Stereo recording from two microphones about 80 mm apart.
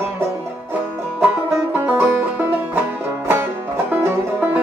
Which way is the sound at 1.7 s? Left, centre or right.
Right.